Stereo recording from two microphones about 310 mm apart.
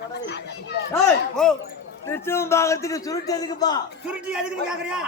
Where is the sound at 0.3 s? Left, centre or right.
Left.